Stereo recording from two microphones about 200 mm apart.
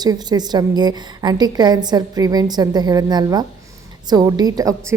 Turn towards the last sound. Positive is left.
turn(degrees=-15)  # may be behind; listen again after turning